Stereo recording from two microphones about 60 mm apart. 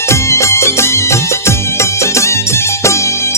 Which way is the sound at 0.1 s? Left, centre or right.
Left.